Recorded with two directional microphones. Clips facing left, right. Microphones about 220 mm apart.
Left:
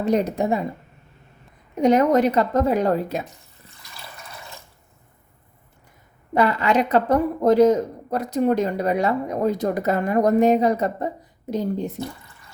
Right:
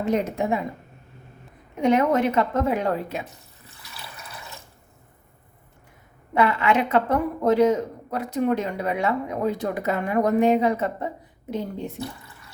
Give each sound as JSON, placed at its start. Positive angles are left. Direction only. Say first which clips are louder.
{"t": 0.0, "sound": "a woman's voice", "louder": "left 3 dB", "side_deg": 35}
{"t": 1.7, "sound": "a woman's voice", "louder": "left 3 dB", "side_deg": 40}
{"t": 6.3, "sound": "a woman's voice", "louder": "left 2 dB", "side_deg": 40}